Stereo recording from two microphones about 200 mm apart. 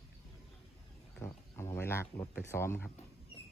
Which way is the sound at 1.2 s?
15° left (ahead or behind).